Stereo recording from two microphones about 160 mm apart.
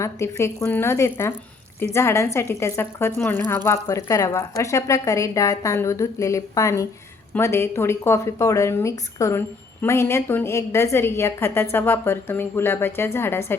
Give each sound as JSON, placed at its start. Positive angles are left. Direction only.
{"t": 0.0, "sound": "a woman's voice", "side_deg": 15}